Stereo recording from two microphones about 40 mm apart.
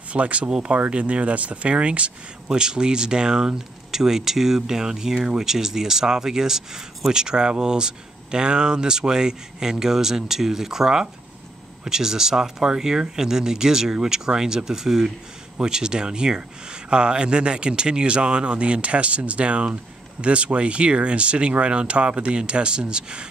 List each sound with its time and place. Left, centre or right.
0.1 s speech: right
2.6 s speech: centre